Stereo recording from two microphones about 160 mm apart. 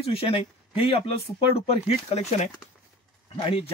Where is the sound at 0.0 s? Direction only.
40° left (ahead or behind).